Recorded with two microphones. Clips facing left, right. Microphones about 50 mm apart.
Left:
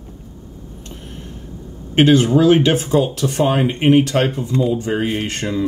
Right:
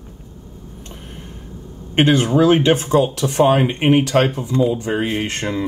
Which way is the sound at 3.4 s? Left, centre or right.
Right.